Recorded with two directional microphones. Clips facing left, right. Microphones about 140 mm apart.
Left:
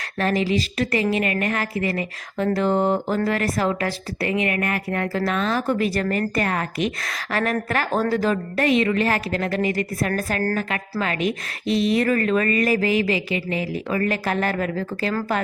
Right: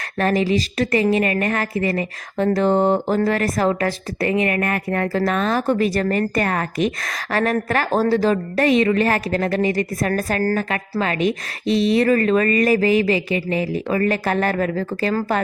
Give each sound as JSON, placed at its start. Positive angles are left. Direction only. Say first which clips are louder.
{"t": 0.0, "sound": "a woman's voice", "louder": "right 3 dB", "side_deg": -45}